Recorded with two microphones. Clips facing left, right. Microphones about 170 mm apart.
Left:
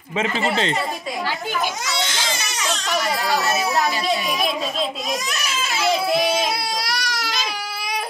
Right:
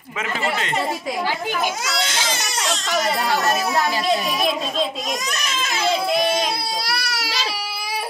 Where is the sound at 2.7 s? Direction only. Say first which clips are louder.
Right 1 dB; centre (ahead or behind).